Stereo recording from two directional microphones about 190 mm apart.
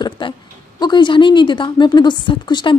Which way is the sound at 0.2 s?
25° left (ahead or behind).